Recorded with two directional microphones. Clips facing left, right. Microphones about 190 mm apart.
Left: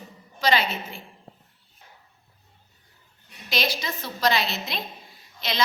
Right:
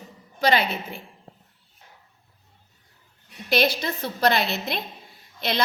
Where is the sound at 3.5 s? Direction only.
60° right (ahead or behind).